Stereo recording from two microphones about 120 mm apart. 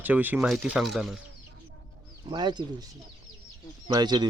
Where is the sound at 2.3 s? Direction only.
40° right (ahead or behind).